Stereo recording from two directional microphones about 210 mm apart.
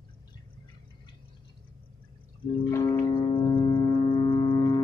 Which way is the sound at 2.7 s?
15° left (ahead or behind).